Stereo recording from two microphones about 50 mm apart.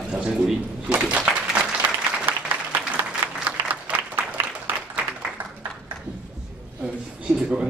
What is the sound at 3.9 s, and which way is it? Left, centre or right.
Applause, right.